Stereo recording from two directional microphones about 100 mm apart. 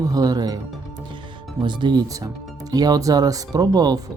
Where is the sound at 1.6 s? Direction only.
45° right (ahead or behind).